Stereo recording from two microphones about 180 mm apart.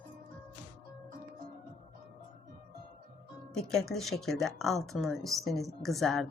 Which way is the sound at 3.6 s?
Centre (ahead or behind).